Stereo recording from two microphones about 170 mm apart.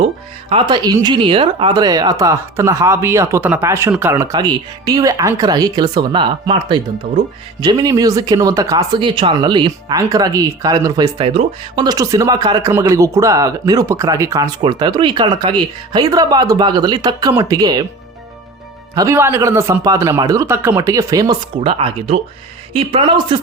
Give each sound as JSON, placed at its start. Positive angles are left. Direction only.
{"t": 0.5, "sound": "speech", "side_deg": -25}
{"t": 18.9, "sound": "speech", "side_deg": -15}